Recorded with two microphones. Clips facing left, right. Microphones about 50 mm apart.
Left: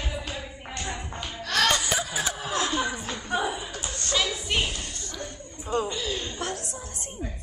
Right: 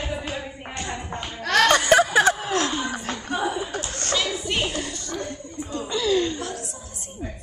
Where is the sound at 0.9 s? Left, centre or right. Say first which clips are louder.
Right 4 dB; right.